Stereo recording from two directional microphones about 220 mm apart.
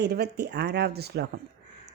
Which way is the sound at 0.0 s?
45° right (ahead or behind).